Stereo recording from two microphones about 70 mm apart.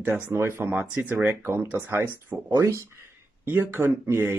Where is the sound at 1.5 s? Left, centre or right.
Right.